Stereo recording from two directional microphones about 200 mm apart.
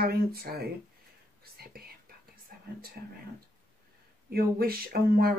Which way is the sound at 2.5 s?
50° right (ahead or behind).